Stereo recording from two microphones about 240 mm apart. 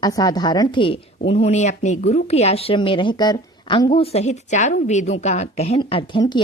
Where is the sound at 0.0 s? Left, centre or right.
Centre.